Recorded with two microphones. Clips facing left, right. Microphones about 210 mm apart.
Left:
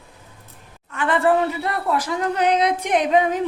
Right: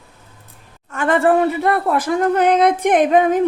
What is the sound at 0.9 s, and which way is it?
Speech, 45° right (ahead or behind).